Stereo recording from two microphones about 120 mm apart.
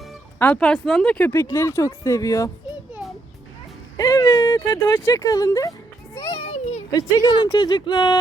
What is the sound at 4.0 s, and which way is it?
Speech, 30° left (ahead or behind).